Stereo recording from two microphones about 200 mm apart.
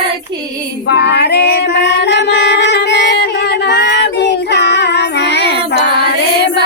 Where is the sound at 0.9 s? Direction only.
55° left (ahead or behind).